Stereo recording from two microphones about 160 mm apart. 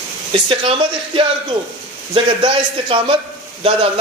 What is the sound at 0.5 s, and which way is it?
Speech, 35° right (ahead or behind).